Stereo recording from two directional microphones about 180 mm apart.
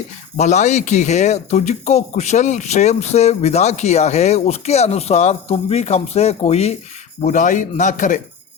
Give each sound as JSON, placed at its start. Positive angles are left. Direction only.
{"t": 0.3, "sound": "a man's voice", "side_deg": 40}